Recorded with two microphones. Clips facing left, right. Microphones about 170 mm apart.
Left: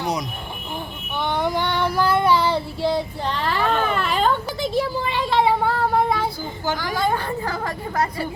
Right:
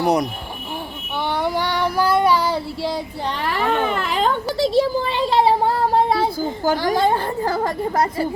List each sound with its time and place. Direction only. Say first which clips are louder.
0.0 s speech: right 7 dB; 60° right (ahead or behind)
1.4 s child singing: right 1 dB; 10° right (ahead or behind)
3.4 s speech: right 1 dB; 15° right (ahead or behind)
4.5 s a sound: right 5 dB; 35° right (ahead or behind)
6.4 s a woman's voice: right 6 dB; 40° right (ahead or behind)